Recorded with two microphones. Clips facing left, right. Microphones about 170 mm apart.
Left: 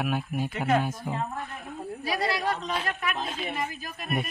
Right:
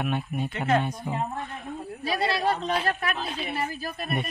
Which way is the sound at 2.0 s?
25° right (ahead or behind).